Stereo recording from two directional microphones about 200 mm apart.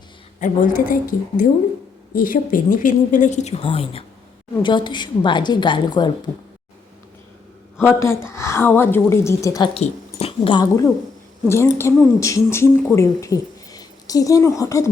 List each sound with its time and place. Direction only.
0.3 s a woman's voice: 40° left (ahead or behind); by 6.3 s 20° left (ahead or behind)
7.9 s a woman's voice: 15° left (ahead or behind)
9.7 s a woman's voice: 30° left (ahead or behind)